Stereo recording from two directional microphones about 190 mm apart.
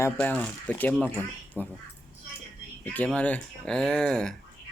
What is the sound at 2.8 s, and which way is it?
Speech, 10° left (ahead or behind).